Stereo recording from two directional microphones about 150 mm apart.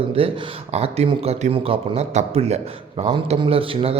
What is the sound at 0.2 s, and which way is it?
A man's voice, 40° right (ahead or behind).